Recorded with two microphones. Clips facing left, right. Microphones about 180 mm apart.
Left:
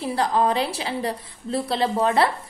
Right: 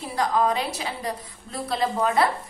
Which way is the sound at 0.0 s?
30° left (ahead or behind).